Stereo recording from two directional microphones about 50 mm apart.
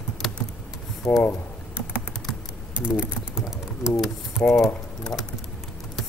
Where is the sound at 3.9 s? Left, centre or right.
Centre.